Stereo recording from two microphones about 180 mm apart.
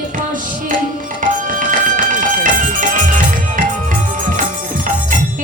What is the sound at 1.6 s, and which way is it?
Music, 45° right (ahead or behind).